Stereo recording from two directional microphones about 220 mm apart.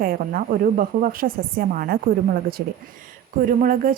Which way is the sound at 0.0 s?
40° right (ahead or behind).